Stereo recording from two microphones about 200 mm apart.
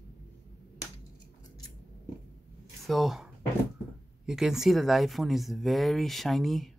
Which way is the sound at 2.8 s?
Centre (ahead or behind).